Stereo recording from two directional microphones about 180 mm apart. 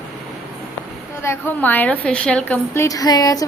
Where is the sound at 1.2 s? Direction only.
15° left (ahead or behind).